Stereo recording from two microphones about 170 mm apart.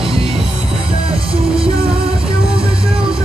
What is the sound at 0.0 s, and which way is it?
Music, 30° right (ahead or behind).